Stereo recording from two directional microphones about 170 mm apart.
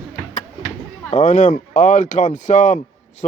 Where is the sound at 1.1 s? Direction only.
45° left (ahead or behind).